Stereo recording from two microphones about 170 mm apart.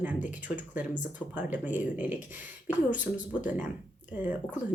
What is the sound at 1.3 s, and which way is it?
Speech, 10° right (ahead or behind).